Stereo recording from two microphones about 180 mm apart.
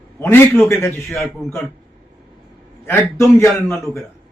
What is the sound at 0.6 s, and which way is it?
Speech, 15° left (ahead or behind).